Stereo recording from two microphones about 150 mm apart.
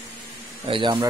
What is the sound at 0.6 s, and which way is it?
Speech, 35° right (ahead or behind).